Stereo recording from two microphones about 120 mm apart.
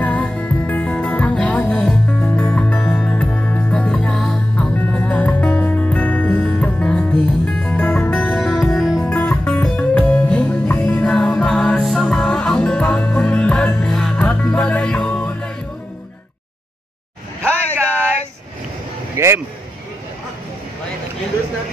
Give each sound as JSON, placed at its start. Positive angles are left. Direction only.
{"t": 0.0, "sound": "music", "side_deg": 10}
{"t": 9.1, "sound": "music", "side_deg": 15}
{"t": 19.1, "sound": "a sound", "side_deg": -20}